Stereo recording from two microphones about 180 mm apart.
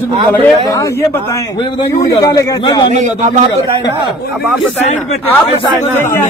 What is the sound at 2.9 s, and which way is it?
Speech, 45° right (ahead or behind).